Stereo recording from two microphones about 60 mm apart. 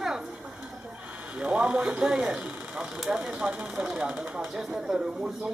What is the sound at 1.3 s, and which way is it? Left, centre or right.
Speech, right.